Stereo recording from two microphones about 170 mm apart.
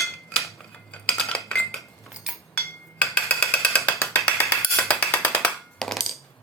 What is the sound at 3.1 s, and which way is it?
Wood block, 5° left (ahead or behind).